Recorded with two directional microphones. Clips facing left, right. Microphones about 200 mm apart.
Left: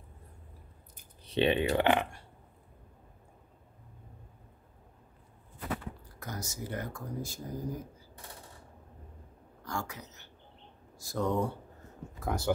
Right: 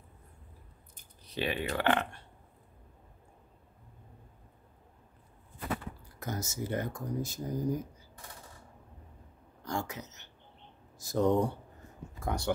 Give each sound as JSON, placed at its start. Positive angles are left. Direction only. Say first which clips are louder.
{"t": 1.2, "sound": "speech", "louder": "left 7 dB", "side_deg": 25}
{"t": 6.1, "sound": "speech", "louder": "right 5 dB", "side_deg": -25}
{"t": 9.6, "sound": "a sound", "louder": "right 2 dB", "side_deg": -20}
{"t": 11.0, "sound": "speech", "louder": "right 4 dB", "side_deg": -20}
{"t": 12.2, "sound": "speech", "louder": "left 2 dB", "side_deg": 5}